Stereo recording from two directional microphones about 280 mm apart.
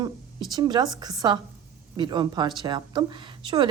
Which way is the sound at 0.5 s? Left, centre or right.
Centre.